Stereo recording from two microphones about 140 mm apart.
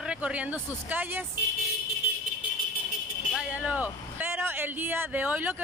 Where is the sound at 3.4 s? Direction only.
10° right (ahead or behind).